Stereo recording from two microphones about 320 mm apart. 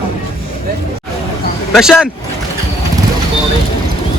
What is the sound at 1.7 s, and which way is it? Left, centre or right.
Speech, centre.